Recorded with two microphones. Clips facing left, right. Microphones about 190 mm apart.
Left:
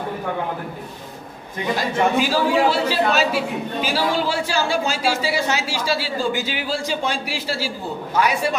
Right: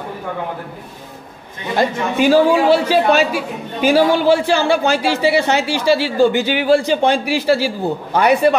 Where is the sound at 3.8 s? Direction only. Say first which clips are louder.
Right 9 dB; 55° right (ahead or behind).